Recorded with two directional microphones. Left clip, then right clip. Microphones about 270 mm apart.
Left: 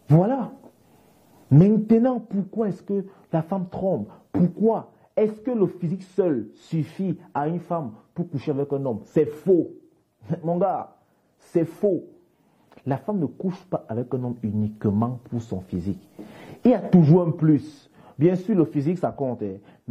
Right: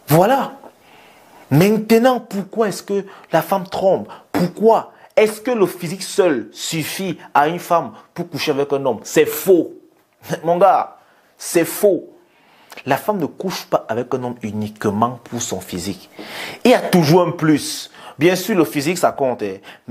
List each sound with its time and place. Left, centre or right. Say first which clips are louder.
0.1 s speech: right 9 dB; centre
13.0 s speech: right 8 dB; centre